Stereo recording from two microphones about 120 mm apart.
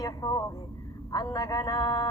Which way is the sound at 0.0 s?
30° left (ahead or behind).